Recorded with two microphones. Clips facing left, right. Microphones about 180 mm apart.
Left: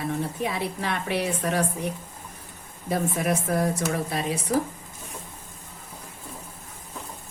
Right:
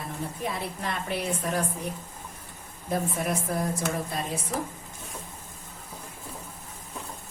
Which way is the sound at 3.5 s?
75° left (ahead or behind).